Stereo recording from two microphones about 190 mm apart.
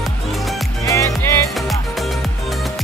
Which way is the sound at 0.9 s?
15° left (ahead or behind).